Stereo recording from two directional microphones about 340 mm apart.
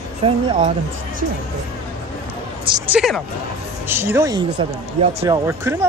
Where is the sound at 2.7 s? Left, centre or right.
Centre.